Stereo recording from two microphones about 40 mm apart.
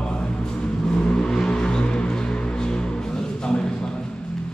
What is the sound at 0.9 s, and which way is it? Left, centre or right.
Vehicle, left.